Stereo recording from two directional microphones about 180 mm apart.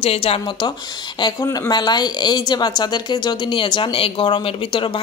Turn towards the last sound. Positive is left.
turn(degrees=25)  # may be behind; listen again after turning